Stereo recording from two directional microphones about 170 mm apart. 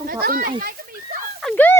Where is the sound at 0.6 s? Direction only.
55° right (ahead or behind).